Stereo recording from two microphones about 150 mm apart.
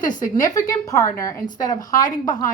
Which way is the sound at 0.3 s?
25° left (ahead or behind).